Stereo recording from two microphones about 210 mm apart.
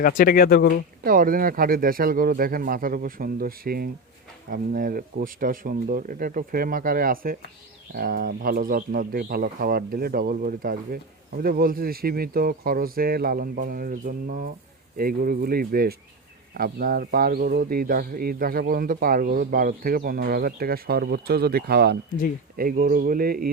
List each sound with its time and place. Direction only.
0.0 s speech: 45° left (ahead or behind)
1.0 s speech: 40° right (ahead or behind)